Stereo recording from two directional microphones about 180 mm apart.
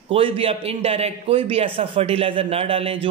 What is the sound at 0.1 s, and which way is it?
Speech, 30° right (ahead or behind).